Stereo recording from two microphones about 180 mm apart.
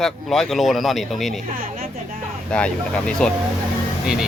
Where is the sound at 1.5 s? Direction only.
50° right (ahead or behind).